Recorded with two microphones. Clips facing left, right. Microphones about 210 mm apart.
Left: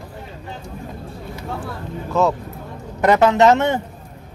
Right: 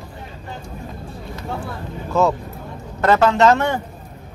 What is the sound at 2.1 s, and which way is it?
Speech, centre (ahead or behind).